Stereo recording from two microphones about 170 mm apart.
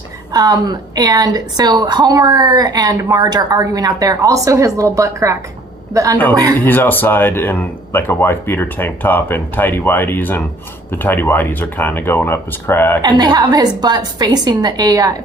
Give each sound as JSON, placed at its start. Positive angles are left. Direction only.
{"t": 0.3, "sound": "a woman's voice", "side_deg": -25}
{"t": 6.7, "sound": "speech", "side_deg": 10}
{"t": 13.0, "sound": "a woman's voice", "side_deg": -25}